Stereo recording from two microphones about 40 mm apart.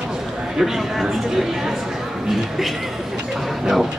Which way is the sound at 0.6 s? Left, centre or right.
Centre.